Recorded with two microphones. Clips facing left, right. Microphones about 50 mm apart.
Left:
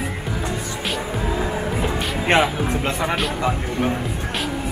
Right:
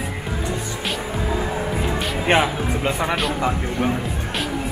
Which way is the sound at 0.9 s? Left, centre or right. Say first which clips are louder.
Even; centre.